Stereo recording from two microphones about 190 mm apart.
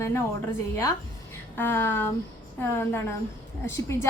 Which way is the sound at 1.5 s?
10° left (ahead or behind).